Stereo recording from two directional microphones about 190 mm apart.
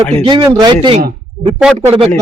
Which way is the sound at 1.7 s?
35° right (ahead or behind).